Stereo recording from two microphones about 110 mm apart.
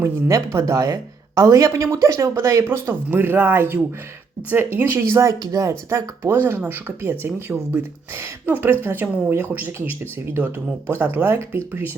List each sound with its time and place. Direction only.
0.0 s speech: 30° right (ahead or behind)